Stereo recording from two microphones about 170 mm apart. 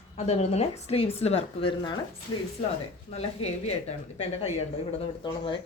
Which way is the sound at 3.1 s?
40° left (ahead or behind).